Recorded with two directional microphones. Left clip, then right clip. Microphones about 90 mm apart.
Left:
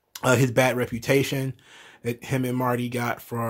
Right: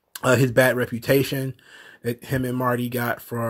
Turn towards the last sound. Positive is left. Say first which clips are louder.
# right 2 dB
turn(degrees=-20)  # may be behind; listen again after turning